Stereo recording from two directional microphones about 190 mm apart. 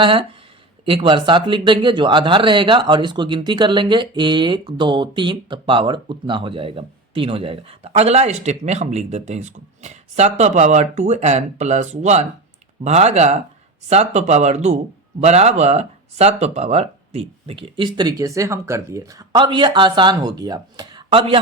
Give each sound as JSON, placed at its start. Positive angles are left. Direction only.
{"t": 0.0, "sound": "speech", "side_deg": -25}